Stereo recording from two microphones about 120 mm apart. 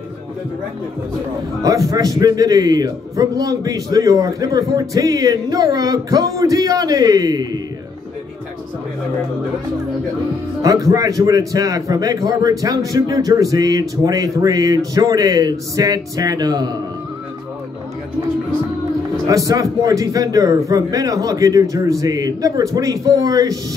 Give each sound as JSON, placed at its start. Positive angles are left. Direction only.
{"t": 1.6, "sound": "a man's voice", "side_deg": -30}
{"t": 10.6, "sound": "a man's voice", "side_deg": -30}
{"t": 19.2, "sound": "a man's voice", "side_deg": -30}